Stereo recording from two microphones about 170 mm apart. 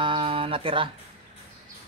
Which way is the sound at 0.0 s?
30° right (ahead or behind).